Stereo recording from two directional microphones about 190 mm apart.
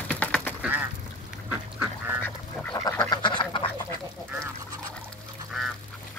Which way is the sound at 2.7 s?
20° left (ahead or behind).